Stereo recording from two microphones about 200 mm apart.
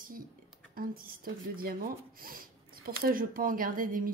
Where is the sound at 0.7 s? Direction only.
45° right (ahead or behind).